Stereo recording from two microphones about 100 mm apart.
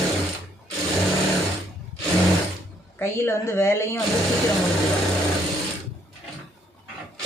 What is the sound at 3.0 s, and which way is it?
Speech, 25° left (ahead or behind).